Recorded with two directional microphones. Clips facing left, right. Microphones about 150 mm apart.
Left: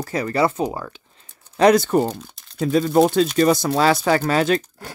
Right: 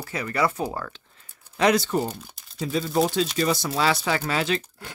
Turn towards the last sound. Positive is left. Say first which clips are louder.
# left 7 dB
turn(degrees=45)  # may be behind; listen again after turning